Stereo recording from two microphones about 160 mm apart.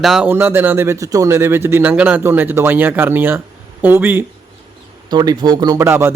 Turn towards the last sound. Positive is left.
turn(degrees=-15)  # may be behind; listen again after turning